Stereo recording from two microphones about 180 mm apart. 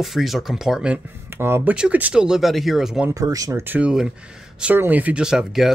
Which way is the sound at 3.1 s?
20° right (ahead or behind).